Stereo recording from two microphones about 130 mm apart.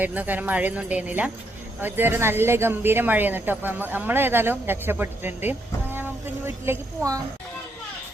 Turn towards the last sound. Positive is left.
turn(degrees=-25)  # may be behind; listen again after turning